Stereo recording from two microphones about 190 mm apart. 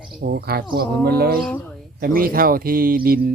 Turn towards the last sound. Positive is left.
turn(degrees=-50)  # may be behind; listen again after turning